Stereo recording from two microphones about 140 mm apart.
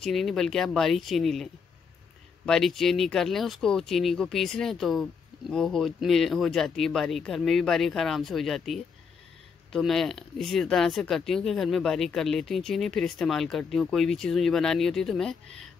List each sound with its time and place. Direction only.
0.0 s speech: centre (ahead or behind)